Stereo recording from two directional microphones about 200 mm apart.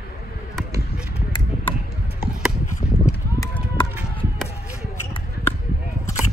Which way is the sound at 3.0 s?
15° left (ahead or behind).